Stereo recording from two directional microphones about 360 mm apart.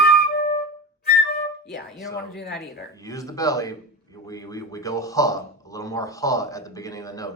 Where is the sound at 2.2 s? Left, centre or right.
Left.